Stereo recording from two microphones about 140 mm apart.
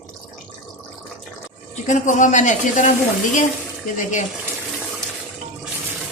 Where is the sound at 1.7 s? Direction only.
60° left (ahead or behind).